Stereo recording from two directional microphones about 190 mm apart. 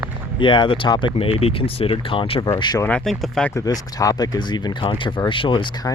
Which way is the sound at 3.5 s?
20° left (ahead or behind).